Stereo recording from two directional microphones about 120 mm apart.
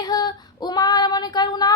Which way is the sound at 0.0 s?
35° left (ahead or behind).